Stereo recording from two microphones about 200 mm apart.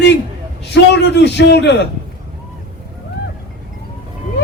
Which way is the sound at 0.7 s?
60° left (ahead or behind).